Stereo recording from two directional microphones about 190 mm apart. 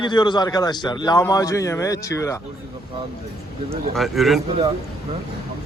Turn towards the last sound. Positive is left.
turn(degrees=-35)  # may be behind; listen again after turning